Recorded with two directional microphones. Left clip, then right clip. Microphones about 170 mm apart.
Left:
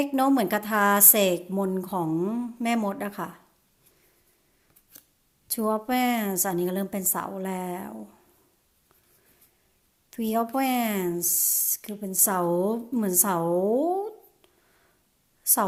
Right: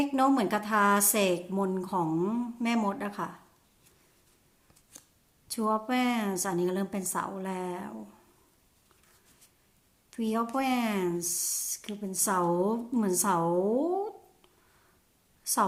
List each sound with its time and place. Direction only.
0.0 s speech: 35° left (ahead or behind)
5.5 s speech: 35° left (ahead or behind)
10.1 s a woman's voice: 35° left (ahead or behind)